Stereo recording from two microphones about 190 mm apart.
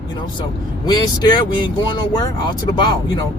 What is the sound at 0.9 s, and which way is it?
Speech, 25° left (ahead or behind).